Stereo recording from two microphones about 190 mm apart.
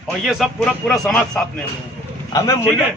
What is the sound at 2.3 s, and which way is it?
Speech, 15° left (ahead or behind).